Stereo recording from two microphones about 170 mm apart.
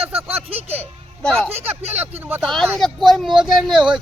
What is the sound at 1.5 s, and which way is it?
Speech, 10° right (ahead or behind).